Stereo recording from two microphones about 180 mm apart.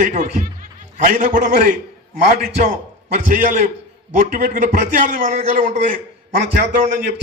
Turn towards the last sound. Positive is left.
turn(degrees=-45)  # may be behind; listen again after turning